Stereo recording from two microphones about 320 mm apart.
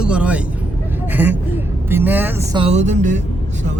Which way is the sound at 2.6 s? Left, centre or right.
Right.